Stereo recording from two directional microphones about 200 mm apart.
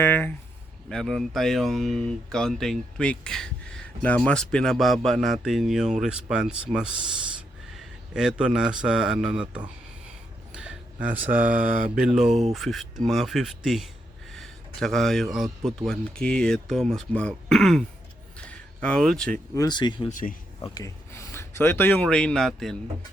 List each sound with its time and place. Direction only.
0.0 s a man's voice: 10° left (ahead or behind)
10.5 s a sound: 5° right (ahead or behind)
11.4 s a sound: 45° right (ahead or behind)
11.9 s speech: 5° right (ahead or behind)
12.3 s speech: 35° right (ahead or behind)
12.5 s speech: centre (ahead or behind)
14.3 s a sound: centre (ahead or behind)
15.6 s speech: centre (ahead or behind)
18.3 s a sound: 5° left (ahead or behind)
19.5 s speech: 20° left (ahead or behind)
20.1 s speech: 40° left (ahead or behind)
20.6 s speech: 15° left (ahead or behind); by 22.7 s centre (ahead or behind)